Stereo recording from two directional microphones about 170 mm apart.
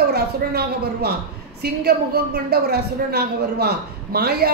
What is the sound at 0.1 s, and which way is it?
A woman's voice, 70° right (ahead or behind).